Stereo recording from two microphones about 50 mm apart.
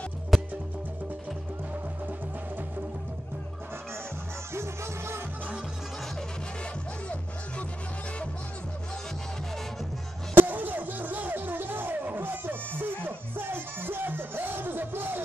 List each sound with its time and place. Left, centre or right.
0.3 s music: centre
4.6 s music: right
10.3 s music: right